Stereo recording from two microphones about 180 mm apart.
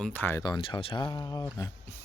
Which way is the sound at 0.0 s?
10° left (ahead or behind).